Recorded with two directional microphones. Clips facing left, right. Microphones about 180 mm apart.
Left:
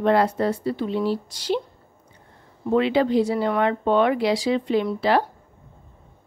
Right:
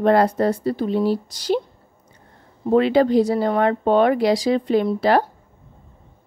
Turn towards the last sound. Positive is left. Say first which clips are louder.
# right 3 dB
turn(degrees=-45)  # may be behind; listen again after turning